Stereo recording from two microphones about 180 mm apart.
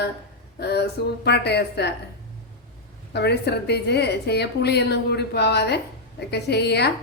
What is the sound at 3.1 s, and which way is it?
A woman's voice, 70° left (ahead or behind).